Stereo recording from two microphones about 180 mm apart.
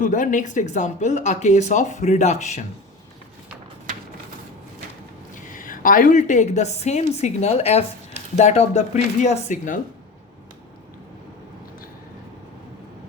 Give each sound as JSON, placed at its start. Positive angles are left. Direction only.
{"t": 0.0, "sound": "speech", "side_deg": 45}
{"t": 5.5, "sound": "speech", "side_deg": 50}